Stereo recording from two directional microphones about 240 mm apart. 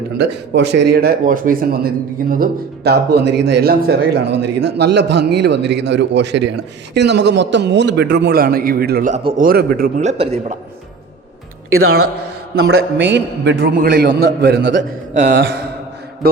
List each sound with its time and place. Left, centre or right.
0.2 s a man's voice: right
12.6 s a man's voice: right
13.7 s a man's voice: right
16.2 s a sound: right